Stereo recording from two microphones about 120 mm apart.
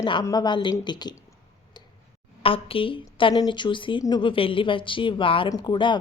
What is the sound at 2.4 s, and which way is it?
Speech, 50° left (ahead or behind).